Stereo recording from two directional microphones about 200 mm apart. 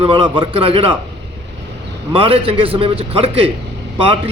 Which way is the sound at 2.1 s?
25° right (ahead or behind).